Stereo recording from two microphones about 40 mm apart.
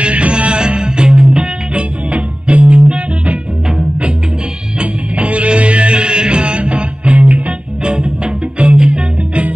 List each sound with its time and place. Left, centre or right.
0.0 s music: right
1.7 s music: right
5.1 s music: right
8.7 s music: centre